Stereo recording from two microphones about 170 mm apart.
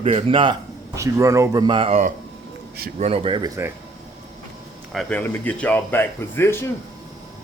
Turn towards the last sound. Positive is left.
turn(degrees=15)  # may be behind; listen again after turning